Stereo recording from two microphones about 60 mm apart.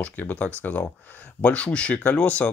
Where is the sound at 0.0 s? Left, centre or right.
Left.